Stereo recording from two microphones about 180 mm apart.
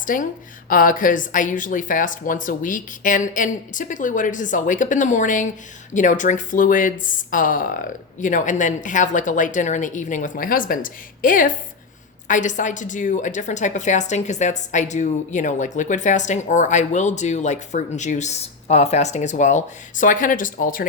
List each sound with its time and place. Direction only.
0.0 s a woman's voice: 50° left (ahead or behind)